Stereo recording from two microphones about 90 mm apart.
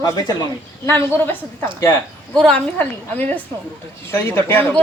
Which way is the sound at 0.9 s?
25° left (ahead or behind).